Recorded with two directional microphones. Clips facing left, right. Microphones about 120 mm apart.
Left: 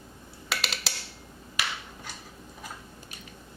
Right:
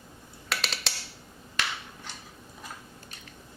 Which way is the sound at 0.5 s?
Centre (ahead or behind).